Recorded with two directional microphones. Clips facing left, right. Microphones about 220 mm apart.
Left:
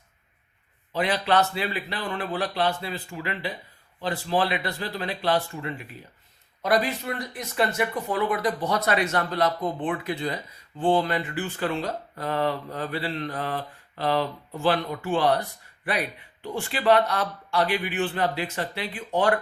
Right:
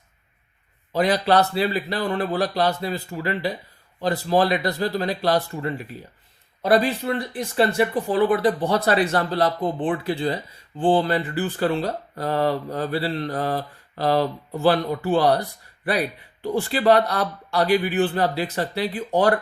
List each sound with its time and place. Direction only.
0.9 s speech: 40° right (ahead or behind)